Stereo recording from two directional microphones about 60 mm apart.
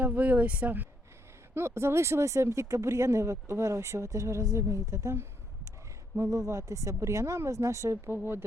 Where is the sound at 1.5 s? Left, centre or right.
Right.